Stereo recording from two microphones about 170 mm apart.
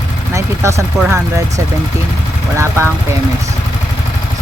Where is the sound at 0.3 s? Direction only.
15° right (ahead or behind).